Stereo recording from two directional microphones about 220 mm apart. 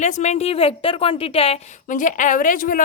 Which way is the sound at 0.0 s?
30° left (ahead or behind).